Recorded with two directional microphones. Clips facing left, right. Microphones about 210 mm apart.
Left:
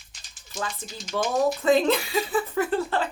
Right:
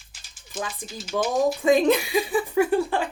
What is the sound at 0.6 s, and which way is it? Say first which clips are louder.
Speech: left 2 dB; 5° right (ahead or behind).